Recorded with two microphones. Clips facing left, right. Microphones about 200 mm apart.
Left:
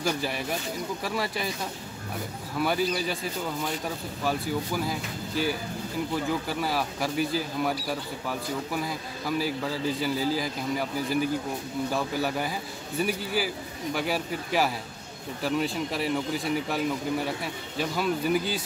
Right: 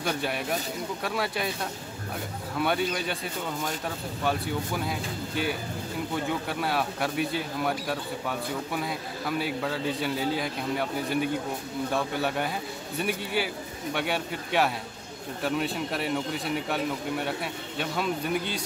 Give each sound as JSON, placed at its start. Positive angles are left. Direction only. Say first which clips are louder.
{"t": 0.0, "sound": "a man's voice", "louder": "left 1 dB", "side_deg": 0}
{"t": 2.6, "sound": "a man's voice", "louder": "left 1 dB", "side_deg": 0}
{"t": 4.2, "sound": "a man's voice", "louder": "even", "side_deg": 0}